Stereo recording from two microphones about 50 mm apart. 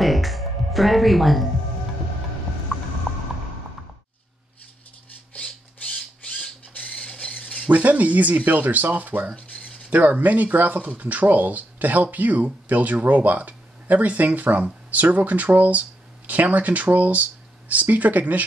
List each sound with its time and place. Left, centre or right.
0.0 s music: centre
5.3 s a sound: centre
6.8 s squawk: left
7.7 s speech: right